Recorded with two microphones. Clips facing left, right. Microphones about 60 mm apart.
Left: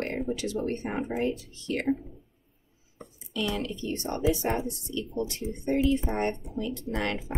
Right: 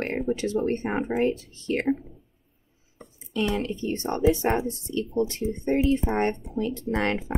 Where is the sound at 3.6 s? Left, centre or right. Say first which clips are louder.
Right 4 dB; right.